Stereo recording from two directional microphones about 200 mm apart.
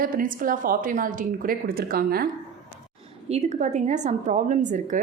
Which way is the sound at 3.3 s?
35° right (ahead or behind).